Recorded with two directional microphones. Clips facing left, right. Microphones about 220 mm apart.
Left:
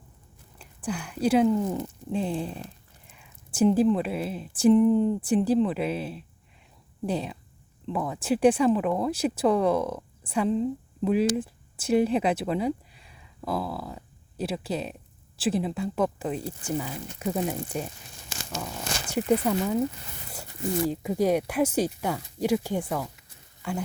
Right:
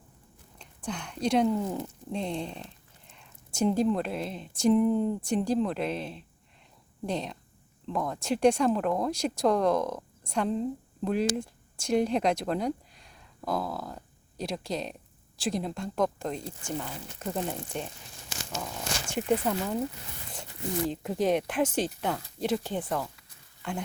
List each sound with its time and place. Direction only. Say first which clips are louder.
0.6 s speech: left 4 dB; 5° left (ahead or behind)
19.1 s speech: left 4 dB; 5° left (ahead or behind)